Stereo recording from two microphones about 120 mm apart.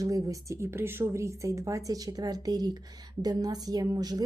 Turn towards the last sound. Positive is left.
turn(degrees=-30)  # may be behind; listen again after turning